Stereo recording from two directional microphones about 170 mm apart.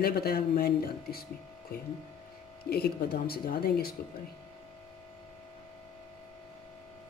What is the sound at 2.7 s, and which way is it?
Speech, 65° left (ahead or behind).